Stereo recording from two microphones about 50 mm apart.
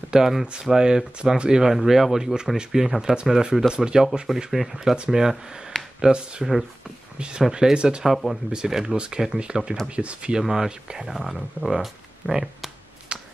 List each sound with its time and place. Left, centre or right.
0.1 s speech: centre
8.0 s speech: centre
8.5 s speech: centre
9.8 s speech: right
10.3 s speech: centre
13.1 s computer keyboard: right